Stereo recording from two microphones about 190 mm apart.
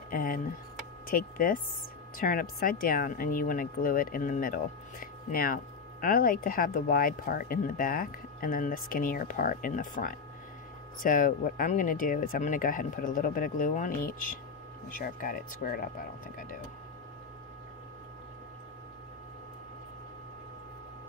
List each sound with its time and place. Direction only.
0.1 s speech: 45° left (ahead or behind)